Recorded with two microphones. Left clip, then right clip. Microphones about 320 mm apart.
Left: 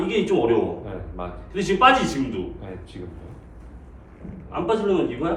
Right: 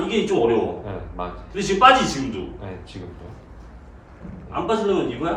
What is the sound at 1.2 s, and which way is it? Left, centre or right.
Speech, right.